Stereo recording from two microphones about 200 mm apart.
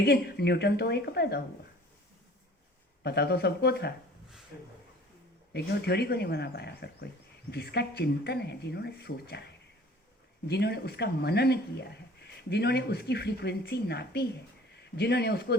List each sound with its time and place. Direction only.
0.0 s speech: 55° left (ahead or behind)
3.0 s speech: 55° left (ahead or behind)
5.5 s speech: 55° left (ahead or behind)
10.4 s speech: 55° left (ahead or behind)